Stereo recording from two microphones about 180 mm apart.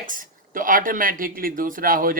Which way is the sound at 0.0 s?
50° right (ahead or behind).